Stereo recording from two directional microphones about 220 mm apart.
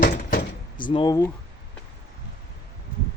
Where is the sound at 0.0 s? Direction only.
40° left (ahead or behind).